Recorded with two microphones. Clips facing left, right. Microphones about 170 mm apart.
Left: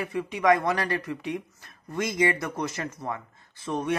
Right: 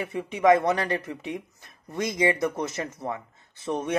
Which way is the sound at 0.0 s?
25° right (ahead or behind).